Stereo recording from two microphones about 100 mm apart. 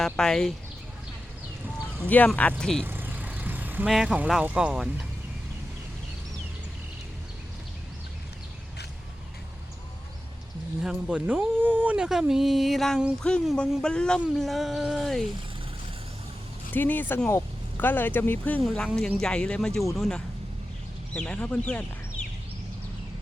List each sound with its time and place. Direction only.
0.0 s speech: 5° left (ahead or behind)
2.0 s speech: 15° left (ahead or behind)
2.8 s vehicle: 20° right (ahead or behind)
3.8 s speech: centre (ahead or behind)
10.8 s speech: 10° right (ahead or behind)
16.7 s speech: 20° left (ahead or behind)
18.6 s speech: 10° left (ahead or behind)